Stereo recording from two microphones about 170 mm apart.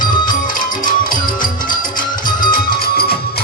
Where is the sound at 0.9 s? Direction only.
55° left (ahead or behind).